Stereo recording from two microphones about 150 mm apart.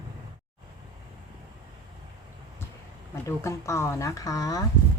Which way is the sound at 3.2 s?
20° left (ahead or behind).